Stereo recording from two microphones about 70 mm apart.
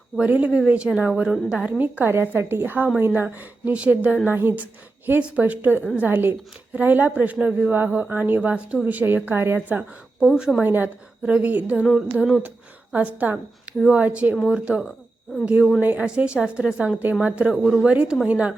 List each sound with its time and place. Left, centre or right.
0.2 s a woman's voice: centre
1.8 s a woman's voice: right
10.2 s a woman's voice: centre
10.6 s a woman's voice: right
15.4 s a woman's voice: centre
16.0 s a woman's voice: centre